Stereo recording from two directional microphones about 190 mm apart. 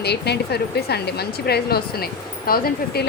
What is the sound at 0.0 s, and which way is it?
A woman's voice, 60° left (ahead or behind).